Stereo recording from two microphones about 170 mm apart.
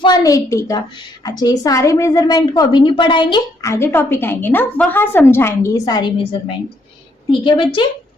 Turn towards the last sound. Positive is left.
turn(degrees=30)  # may be behind; listen again after turning